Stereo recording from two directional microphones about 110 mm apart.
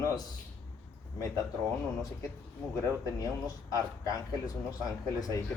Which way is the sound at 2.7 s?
30° left (ahead or behind).